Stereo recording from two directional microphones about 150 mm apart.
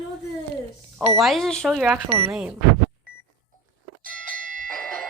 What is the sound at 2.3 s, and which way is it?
Speech, 10° right (ahead or behind).